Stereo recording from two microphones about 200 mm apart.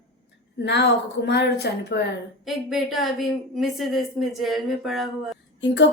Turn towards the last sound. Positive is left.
turn(degrees=65)  # may be behind; listen again after turning